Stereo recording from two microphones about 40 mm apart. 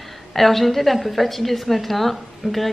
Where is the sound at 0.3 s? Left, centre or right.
Centre.